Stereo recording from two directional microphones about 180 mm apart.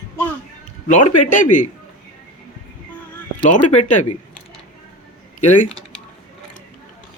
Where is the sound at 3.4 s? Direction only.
40° left (ahead or behind).